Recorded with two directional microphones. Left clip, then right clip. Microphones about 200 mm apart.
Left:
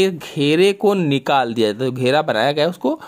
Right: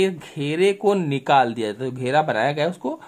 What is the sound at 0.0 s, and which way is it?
Speech, 25° left (ahead or behind).